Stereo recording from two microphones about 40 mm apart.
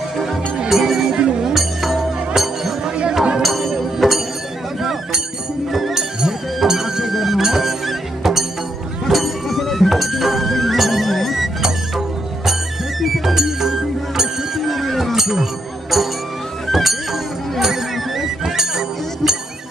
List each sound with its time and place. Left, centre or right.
0.7 s music: centre
1.1 s music: right
1.4 s music: centre
2.8 s chatter: centre
3.4 s music: centre
5.7 s music: centre
13.0 s music: centre
14.7 s a sound: centre
15.1 s music: centre
16.6 s music: centre